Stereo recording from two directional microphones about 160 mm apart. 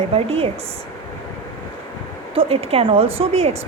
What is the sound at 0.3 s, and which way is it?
Speech, 35° right (ahead or behind).